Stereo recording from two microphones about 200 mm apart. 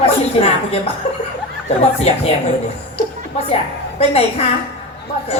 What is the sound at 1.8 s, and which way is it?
Speech, 30° left (ahead or behind).